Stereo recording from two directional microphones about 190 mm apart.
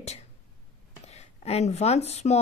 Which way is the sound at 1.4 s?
35° left (ahead or behind).